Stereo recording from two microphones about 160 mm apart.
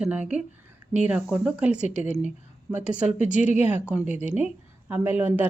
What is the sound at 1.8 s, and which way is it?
Speech, 45° left (ahead or behind).